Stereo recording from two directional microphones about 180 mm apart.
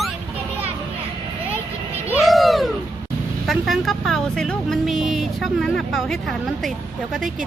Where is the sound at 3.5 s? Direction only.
Centre (ahead or behind).